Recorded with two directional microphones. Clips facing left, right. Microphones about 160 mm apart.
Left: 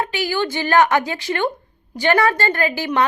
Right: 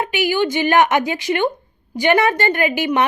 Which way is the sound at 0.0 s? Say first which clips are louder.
Right 3 dB; 20° right (ahead or behind).